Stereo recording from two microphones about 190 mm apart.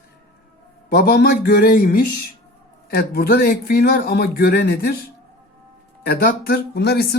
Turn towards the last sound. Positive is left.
turn(degrees=60)  # may be behind; listen again after turning